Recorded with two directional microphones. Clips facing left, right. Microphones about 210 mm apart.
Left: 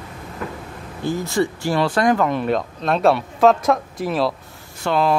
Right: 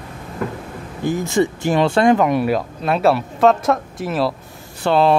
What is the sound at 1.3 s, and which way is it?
Speech, 20° right (ahead or behind).